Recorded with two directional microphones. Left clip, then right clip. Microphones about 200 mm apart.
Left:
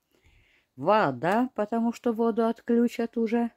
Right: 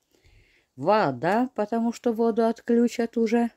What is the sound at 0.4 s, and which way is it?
Speech, centre (ahead or behind).